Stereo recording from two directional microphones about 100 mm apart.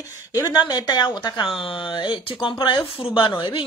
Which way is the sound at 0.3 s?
40° left (ahead or behind).